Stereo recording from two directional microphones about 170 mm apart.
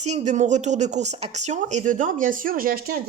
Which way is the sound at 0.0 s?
40° right (ahead or behind).